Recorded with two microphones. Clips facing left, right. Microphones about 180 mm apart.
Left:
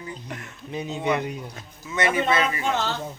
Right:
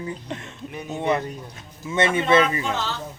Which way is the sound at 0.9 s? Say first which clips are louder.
Right 2 dB; 25° right (ahead or behind).